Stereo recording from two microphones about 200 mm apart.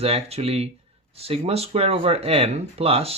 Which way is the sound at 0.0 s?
30° right (ahead or behind).